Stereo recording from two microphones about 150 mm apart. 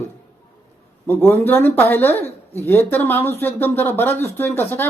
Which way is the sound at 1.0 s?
15° left (ahead or behind).